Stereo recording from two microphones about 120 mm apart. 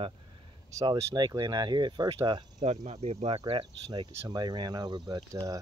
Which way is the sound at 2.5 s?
70° right (ahead or behind).